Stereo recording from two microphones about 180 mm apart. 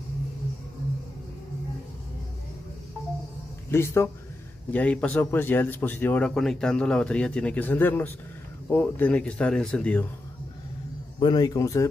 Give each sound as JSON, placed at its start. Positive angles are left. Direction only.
{"t": 3.7, "sound": "a man's voice", "side_deg": 15}
{"t": 11.1, "sound": "a man's voice", "side_deg": 25}